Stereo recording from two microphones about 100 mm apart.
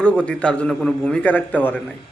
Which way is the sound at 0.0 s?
10° left (ahead or behind).